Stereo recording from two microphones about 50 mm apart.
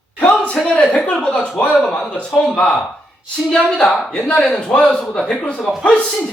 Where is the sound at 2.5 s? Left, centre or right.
Left.